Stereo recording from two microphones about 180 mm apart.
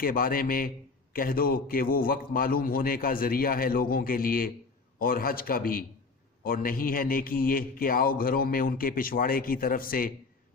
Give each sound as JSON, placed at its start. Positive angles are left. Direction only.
{"t": 0.0, "sound": "a man's voice", "side_deg": 55}